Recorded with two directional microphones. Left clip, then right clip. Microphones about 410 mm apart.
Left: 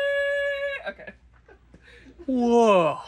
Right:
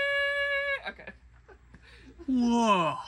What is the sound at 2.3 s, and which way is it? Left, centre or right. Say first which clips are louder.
Speech: left 7 dB; centre.